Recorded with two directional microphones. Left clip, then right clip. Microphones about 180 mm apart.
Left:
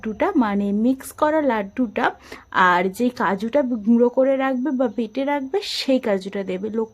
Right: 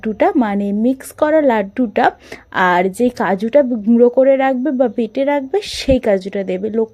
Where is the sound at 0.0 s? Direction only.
20° right (ahead or behind).